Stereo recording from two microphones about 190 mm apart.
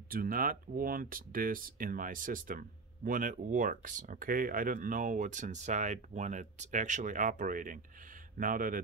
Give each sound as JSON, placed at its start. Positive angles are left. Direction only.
{"t": 0.1, "sound": "speech", "side_deg": -50}